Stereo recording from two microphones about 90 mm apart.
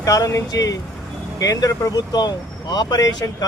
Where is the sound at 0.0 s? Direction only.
40° left (ahead or behind).